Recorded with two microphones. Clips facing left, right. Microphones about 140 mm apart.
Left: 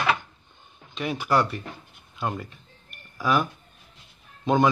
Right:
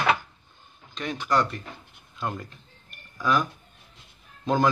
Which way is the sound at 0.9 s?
10° left (ahead or behind).